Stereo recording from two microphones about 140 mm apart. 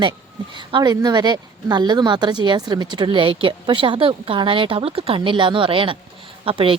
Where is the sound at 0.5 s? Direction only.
30° right (ahead or behind).